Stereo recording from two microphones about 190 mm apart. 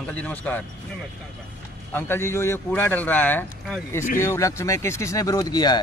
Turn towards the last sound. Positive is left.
turn(degrees=20)  # may be behind; listen again after turning